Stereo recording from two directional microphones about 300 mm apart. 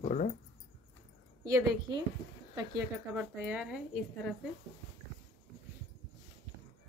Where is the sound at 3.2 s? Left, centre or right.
Centre.